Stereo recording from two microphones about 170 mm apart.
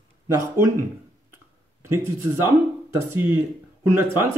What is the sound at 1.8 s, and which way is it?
Speech, 15° right (ahead or behind).